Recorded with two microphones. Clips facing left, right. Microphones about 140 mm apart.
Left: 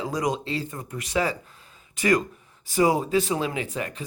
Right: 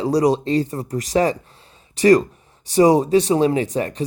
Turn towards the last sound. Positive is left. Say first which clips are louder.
# right 9 dB
turn(degrees=-35)  # may be behind; listen again after turning